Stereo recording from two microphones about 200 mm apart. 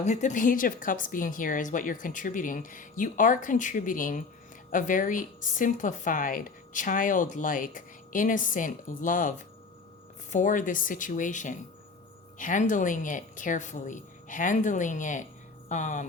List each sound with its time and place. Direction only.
0.0 s a woman's voice: 35° left (ahead or behind)
10.3 s a woman's voice: 40° left (ahead or behind)